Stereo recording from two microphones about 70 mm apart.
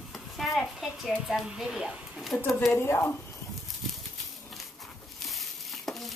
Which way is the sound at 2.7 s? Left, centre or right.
Left.